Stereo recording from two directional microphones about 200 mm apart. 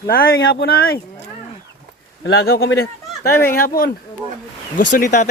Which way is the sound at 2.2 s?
50° left (ahead or behind).